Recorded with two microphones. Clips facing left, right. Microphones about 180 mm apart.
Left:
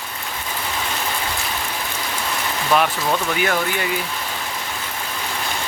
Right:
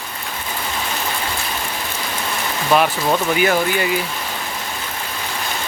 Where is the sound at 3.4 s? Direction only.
5° right (ahead or behind).